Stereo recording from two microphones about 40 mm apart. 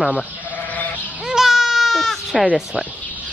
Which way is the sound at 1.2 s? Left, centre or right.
Centre.